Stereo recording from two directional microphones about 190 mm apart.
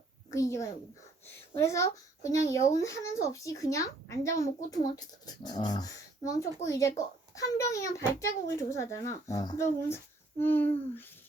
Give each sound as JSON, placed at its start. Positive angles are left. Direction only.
{"t": 0.3, "sound": "speech", "side_deg": 15}